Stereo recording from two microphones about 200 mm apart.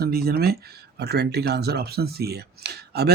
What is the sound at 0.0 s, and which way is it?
Speech, 50° right (ahead or behind).